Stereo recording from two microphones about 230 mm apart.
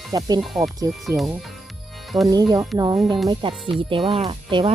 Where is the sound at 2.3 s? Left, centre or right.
Centre.